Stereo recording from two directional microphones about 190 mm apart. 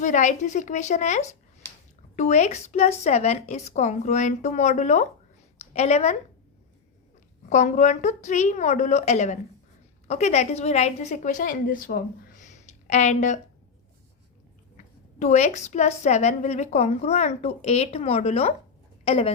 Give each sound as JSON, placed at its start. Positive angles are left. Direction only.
{"t": 0.0, "sound": "a woman's voice", "side_deg": 40}
{"t": 7.5, "sound": "a woman's voice", "side_deg": 40}
{"t": 15.2, "sound": "a woman's voice", "side_deg": 35}